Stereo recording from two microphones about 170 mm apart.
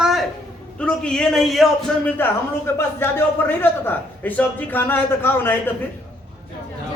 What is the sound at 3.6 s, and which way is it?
A man's voice, 10° left (ahead or behind).